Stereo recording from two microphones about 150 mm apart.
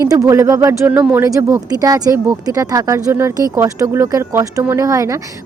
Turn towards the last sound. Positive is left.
turn(degrees=-20)  # may be behind; listen again after turning